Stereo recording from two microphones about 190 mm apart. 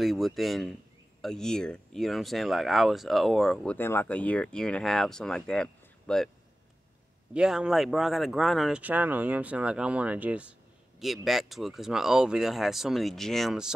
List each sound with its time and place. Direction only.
0.0 s speech: centre (ahead or behind)
7.3 s speech: 5° right (ahead or behind)